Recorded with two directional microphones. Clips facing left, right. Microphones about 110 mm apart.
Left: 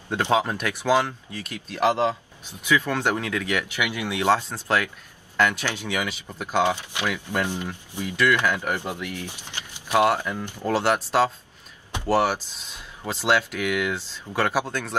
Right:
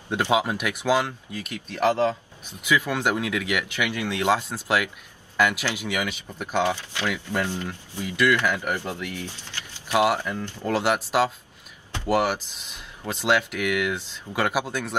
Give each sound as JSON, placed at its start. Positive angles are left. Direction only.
{"t": 0.1, "sound": "speech", "side_deg": -10}
{"t": 1.7, "sound": "speech", "side_deg": 15}
{"t": 2.6, "sound": "speech", "side_deg": -10}
{"t": 3.7, "sound": "speech", "side_deg": 15}
{"t": 4.3, "sound": "speech", "side_deg": -10}
{"t": 6.6, "sound": "speech", "side_deg": 15}
{"t": 10.8, "sound": "speech", "side_deg": -5}